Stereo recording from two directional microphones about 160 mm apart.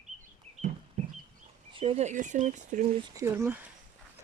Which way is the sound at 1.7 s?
35° right (ahead or behind).